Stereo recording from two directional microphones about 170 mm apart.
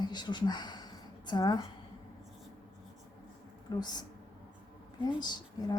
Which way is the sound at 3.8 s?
25° left (ahead or behind).